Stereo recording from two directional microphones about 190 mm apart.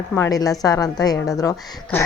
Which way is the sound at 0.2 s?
20° left (ahead or behind).